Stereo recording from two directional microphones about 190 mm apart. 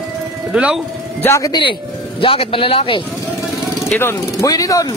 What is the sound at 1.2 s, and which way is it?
Speech, 15° left (ahead or behind).